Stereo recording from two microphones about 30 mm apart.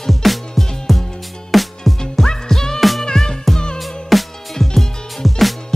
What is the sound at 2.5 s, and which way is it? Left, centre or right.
Music, centre.